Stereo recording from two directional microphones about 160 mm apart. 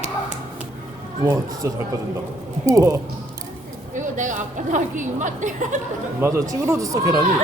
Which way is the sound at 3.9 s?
50° right (ahead or behind).